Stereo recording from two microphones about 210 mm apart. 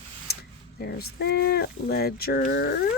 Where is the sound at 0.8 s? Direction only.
50° left (ahead or behind).